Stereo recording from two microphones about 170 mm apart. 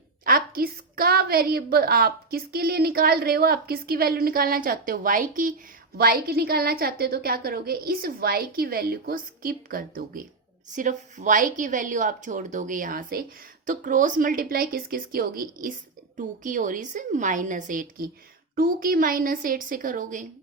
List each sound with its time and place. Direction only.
0.3 s a woman's voice: 60° right (ahead or behind)
6.0 s a woman's voice: 60° right (ahead or behind)